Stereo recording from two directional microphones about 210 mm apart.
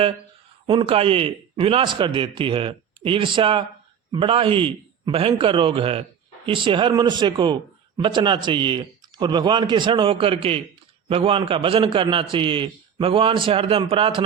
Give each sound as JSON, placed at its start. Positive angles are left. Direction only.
{"t": 0.7, "sound": "a man's voice", "side_deg": -25}